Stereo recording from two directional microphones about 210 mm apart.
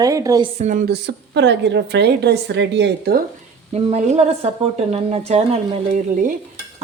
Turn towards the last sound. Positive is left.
turn(degrees=-35)  # may be behind; listen again after turning